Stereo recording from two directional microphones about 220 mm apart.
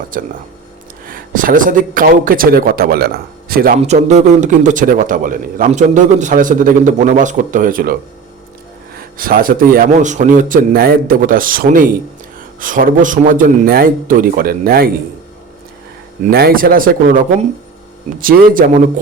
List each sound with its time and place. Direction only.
0.1 s a man's voice: 40° right (ahead or behind)
3.8 s a man's voice: 30° right (ahead or behind)
9.0 s a man's voice: 40° right (ahead or behind)
16.2 s a man's voice: 45° right (ahead or behind)